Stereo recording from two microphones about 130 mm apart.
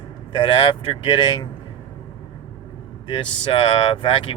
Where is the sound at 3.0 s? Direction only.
35° left (ahead or behind).